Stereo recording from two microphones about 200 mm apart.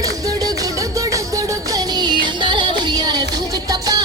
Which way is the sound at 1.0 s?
15° right (ahead or behind).